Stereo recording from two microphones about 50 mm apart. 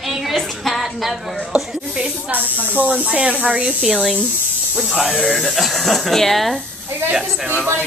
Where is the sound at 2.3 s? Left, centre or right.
Right.